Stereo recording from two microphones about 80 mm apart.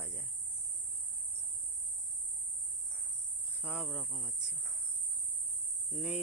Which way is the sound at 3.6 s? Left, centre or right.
Centre.